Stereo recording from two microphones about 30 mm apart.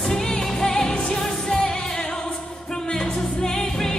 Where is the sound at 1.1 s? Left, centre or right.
Centre.